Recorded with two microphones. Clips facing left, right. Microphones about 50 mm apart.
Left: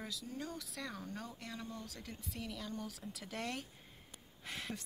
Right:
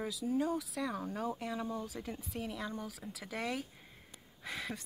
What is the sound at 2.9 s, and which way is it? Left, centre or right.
Speech, centre.